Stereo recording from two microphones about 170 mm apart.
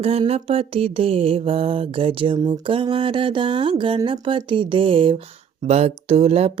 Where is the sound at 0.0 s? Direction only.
35° right (ahead or behind).